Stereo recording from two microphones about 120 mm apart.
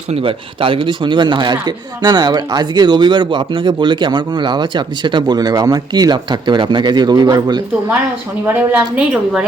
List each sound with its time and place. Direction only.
0.1 s speech: 50° right (ahead or behind)
8.4 s a woman's voice: 10° right (ahead or behind)